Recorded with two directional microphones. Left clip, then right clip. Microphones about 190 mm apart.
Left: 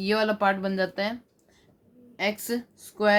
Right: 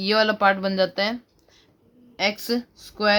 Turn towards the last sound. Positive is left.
turn(degrees=-40)  # may be behind; listen again after turning